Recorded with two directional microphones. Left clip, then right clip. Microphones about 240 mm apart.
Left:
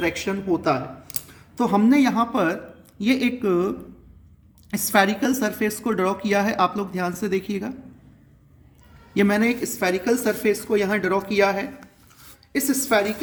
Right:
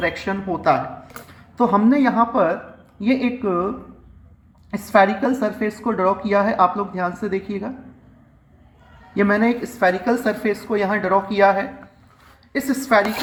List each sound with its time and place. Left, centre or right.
0.0 s a woman's voice: left
1.8 s a woman's voice: left
4.7 s a woman's voice: left
9.1 s a woman's voice: left; by 13.1 s centre